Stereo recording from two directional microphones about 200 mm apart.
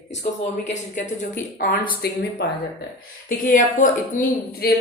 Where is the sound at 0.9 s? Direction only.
45° left (ahead or behind).